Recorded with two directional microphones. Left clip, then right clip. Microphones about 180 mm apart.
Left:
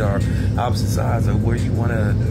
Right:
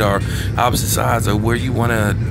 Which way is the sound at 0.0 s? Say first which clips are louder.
Right 6 dB; 15° right (ahead or behind).